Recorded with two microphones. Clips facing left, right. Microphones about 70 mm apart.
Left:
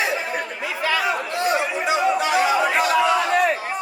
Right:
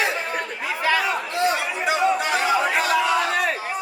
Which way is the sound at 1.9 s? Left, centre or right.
Centre.